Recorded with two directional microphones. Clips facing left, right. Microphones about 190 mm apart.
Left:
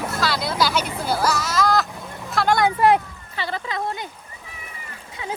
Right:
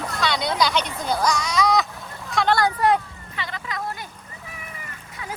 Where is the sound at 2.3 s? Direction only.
Centre (ahead or behind).